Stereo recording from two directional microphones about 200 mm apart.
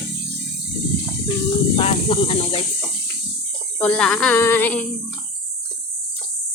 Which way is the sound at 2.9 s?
55° right (ahead or behind).